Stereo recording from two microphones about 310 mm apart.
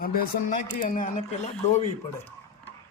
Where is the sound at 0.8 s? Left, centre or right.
Left.